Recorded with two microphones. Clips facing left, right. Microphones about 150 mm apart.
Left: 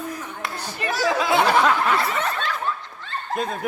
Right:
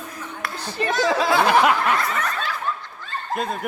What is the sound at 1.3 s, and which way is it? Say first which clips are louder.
Speech: even; 25° left (ahead or behind).